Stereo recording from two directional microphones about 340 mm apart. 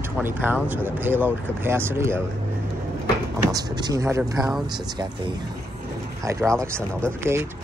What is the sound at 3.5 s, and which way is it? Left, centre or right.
Speech, centre.